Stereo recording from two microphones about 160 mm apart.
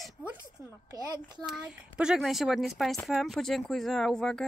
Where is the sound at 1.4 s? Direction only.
5° right (ahead or behind).